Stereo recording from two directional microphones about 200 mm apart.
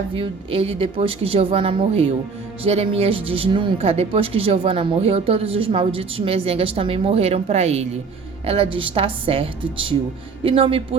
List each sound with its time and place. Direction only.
0.1 s speech: 30° right (ahead or behind)